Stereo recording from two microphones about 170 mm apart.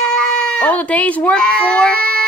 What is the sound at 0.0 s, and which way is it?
Speech, 5° left (ahead or behind).